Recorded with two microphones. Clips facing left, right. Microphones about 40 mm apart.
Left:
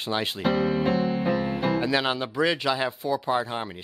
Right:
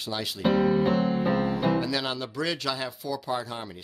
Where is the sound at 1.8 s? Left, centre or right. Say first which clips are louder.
Left 5 dB; left.